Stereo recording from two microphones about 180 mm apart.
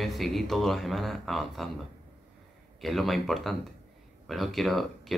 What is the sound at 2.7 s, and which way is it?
Speech, centre (ahead or behind).